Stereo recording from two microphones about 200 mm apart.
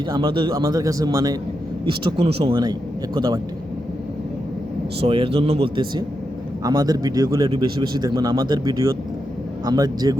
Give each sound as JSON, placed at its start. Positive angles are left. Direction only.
{"t": 0.1, "sound": "a man's voice", "side_deg": -25}
{"t": 5.0, "sound": "a man's voice", "side_deg": -25}